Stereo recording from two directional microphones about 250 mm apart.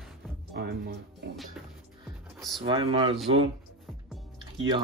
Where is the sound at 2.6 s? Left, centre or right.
Centre.